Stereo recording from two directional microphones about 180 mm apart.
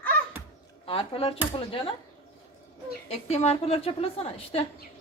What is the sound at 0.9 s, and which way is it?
Speech, 30° left (ahead or behind).